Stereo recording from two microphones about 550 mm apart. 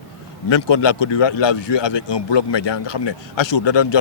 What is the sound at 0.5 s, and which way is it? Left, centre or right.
A man's voice, left.